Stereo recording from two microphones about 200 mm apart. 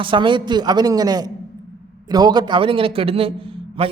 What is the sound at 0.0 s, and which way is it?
A man's voice, 25° right (ahead or behind).